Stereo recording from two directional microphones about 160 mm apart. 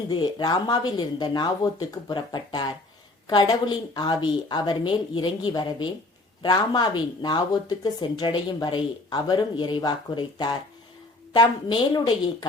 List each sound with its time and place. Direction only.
0.1 s speech: 30° left (ahead or behind)